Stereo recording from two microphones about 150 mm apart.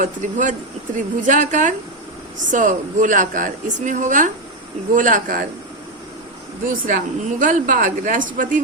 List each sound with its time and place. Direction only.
0.0 s speech: 60° right (ahead or behind)
6.8 s speech: 60° right (ahead or behind)